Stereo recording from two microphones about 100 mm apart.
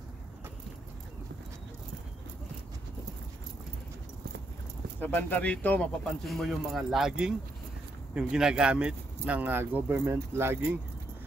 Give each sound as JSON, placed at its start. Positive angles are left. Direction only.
{"t": 5.0, "sound": "speech", "side_deg": 20}
{"t": 6.0, "sound": "speech", "side_deg": 0}
{"t": 9.9, "sound": "speech", "side_deg": -30}